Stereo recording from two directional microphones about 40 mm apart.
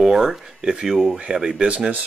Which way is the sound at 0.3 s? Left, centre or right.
Centre.